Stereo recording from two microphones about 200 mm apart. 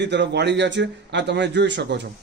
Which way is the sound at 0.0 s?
60° right (ahead or behind).